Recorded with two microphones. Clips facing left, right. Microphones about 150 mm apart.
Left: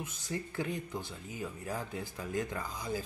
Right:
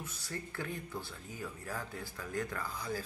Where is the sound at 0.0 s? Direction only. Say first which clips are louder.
Left 4 dB; 15° left (ahead or behind).